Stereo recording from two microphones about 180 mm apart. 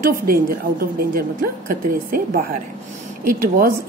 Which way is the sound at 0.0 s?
55° right (ahead or behind).